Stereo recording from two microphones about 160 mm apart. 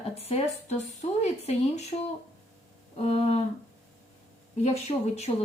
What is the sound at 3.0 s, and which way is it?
Speech, 40° left (ahead or behind).